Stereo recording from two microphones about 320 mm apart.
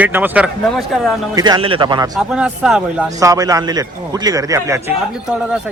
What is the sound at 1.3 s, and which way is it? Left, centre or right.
Speech, centre.